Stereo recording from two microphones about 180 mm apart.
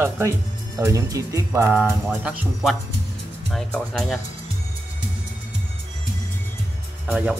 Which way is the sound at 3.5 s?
5° left (ahead or behind).